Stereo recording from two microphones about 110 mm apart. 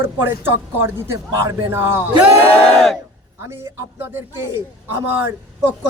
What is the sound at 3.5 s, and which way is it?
Speech, 20° right (ahead or behind).